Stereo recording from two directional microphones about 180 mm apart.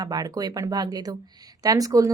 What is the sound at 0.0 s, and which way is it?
Speech, 20° right (ahead or behind).